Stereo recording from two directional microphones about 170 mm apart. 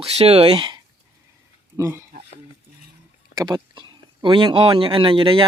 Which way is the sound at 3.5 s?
25° right (ahead or behind).